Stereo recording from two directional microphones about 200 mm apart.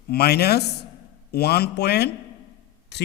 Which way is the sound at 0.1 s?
55° left (ahead or behind).